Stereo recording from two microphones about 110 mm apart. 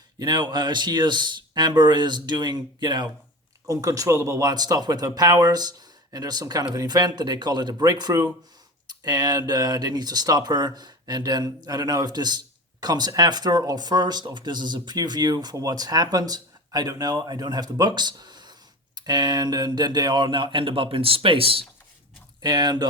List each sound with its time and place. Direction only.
0.2 s speech: 40° right (ahead or behind); by 21.6 s 55° right (ahead or behind)
22.4 s speech: 40° right (ahead or behind)